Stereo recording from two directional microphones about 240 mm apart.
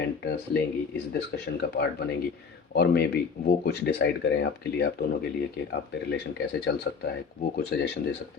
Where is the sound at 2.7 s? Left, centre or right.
Left.